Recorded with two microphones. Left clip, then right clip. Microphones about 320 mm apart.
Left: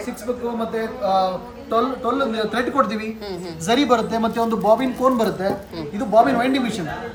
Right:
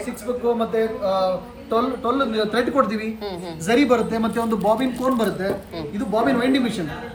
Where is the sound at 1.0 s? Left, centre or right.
Centre.